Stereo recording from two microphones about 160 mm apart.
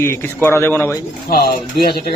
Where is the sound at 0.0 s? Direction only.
15° left (ahead or behind).